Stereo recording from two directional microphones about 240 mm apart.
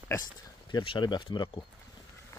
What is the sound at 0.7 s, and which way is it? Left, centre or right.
Speech, centre.